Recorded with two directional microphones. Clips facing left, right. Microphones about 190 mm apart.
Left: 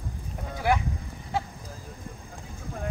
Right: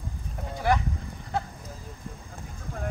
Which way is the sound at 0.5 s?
10° left (ahead or behind).